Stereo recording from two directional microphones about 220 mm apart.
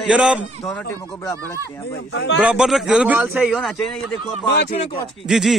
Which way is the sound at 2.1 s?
55° left (ahead or behind).